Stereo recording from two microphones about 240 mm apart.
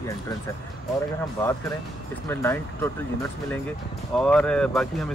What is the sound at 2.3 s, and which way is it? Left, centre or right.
Speech, centre.